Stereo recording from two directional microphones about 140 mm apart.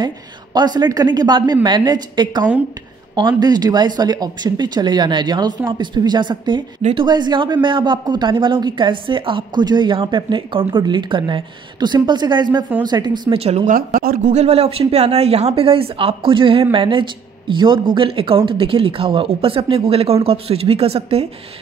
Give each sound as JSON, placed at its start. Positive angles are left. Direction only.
{"t": 0.0, "sound": "a woman's voice", "side_deg": -30}
{"t": 13.4, "sound": "speech", "side_deg": -45}
{"t": 13.7, "sound": "speech", "side_deg": -90}
{"t": 14.3, "sound": "a woman's voice", "side_deg": -50}